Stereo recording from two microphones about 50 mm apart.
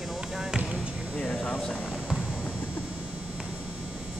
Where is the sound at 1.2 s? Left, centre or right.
Left.